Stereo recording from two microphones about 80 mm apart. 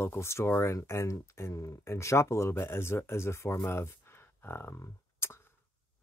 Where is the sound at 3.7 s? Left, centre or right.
Left.